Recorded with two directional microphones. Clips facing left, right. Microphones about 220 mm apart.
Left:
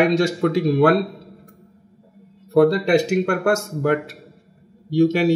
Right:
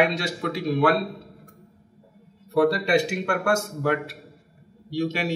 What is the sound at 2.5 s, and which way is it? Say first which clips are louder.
Speech: left 5 dB; 45° left (ahead or behind).